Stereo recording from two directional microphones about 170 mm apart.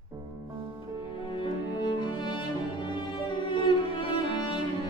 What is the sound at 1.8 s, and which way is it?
Music, 25° left (ahead or behind).